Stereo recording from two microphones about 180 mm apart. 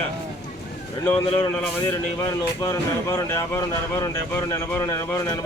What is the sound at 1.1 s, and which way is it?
Speech, 30° left (ahead or behind).